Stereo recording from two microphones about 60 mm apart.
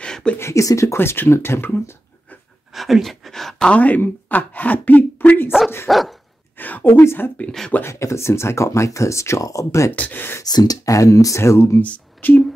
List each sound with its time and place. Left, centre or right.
0.0 s a sound: centre
0.4 s speech: left
0.9 s speech: left
2.7 s speech: centre
3.6 s speech: left
5.9 s dog: centre
6.6 s speech: left
7.8 s speech: left
9.9 s speech: left
10.4 s speech: left
11.8 s speech: left